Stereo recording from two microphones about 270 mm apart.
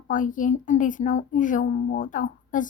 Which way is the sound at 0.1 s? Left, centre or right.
Left.